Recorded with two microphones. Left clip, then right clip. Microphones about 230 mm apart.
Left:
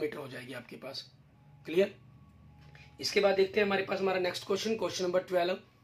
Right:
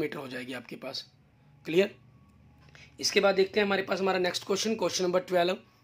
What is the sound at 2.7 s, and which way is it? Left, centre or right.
Speech, right.